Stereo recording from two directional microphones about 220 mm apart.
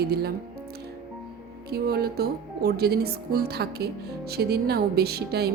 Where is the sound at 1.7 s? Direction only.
45° right (ahead or behind).